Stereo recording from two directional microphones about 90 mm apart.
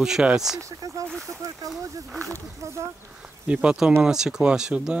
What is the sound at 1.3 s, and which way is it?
Speech, 40° right (ahead or behind).